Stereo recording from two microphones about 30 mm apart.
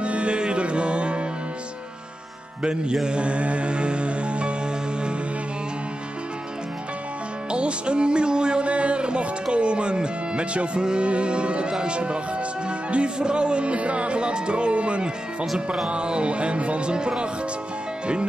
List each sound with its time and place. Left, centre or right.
0.0 s music: right
2.6 s speech: right
3.1 s music: right
7.5 s speech: right
8.6 s speech: right
10.8 s music: right
11.1 s speech: right